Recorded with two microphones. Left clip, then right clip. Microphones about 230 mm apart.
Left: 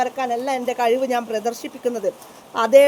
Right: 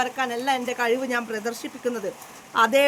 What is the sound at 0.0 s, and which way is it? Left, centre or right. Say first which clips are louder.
A man's voice: left 3 dB; centre.